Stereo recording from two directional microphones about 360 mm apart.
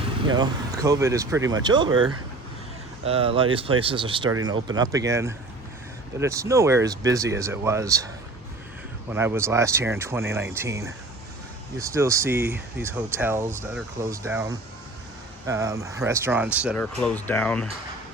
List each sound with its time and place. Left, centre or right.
0.3 s speech: centre
3.0 s speech: centre
9.0 s speech: centre